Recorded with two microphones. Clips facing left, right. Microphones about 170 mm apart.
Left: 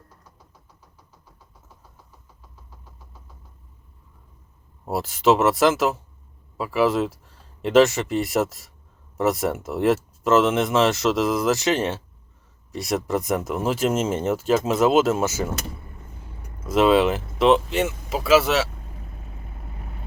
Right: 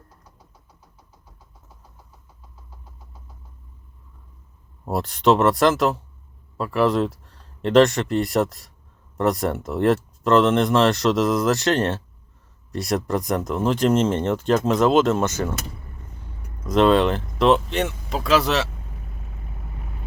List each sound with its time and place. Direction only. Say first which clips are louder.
4.9 s speech: right 1 dB; 5° left (ahead or behind)
16.6 s speech: right 1 dB; 5° left (ahead or behind)